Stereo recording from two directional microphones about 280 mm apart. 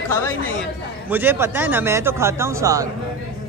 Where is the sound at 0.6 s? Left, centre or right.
Centre.